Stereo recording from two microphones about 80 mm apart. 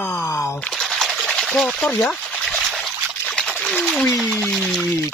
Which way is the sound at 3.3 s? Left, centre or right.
Centre.